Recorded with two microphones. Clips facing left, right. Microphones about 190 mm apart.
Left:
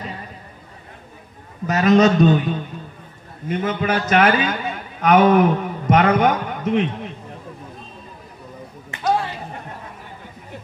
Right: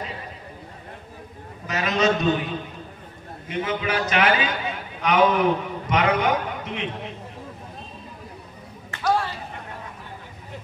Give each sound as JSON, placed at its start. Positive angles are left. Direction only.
{"t": 1.7, "sound": "a man's voice", "side_deg": 40}
{"t": 3.4, "sound": "a man's voice", "side_deg": 45}
{"t": 8.9, "sound": "a sound", "side_deg": 20}